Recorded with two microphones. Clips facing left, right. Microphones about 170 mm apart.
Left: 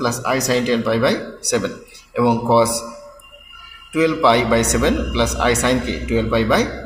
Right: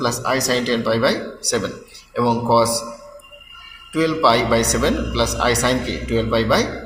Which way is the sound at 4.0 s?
15° left (ahead or behind).